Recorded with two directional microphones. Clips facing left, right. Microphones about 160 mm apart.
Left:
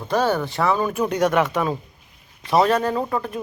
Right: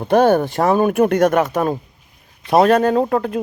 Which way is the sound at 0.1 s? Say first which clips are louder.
Right 7 dB; 55° right (ahead or behind).